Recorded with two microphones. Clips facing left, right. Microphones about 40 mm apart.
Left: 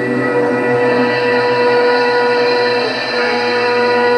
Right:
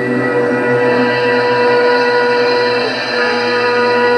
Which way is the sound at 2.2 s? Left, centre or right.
Centre.